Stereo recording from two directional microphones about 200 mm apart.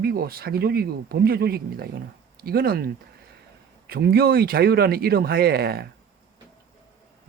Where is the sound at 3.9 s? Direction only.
50° right (ahead or behind).